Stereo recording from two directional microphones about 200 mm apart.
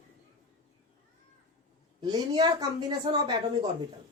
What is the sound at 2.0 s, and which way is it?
A woman's voice, 20° right (ahead or behind).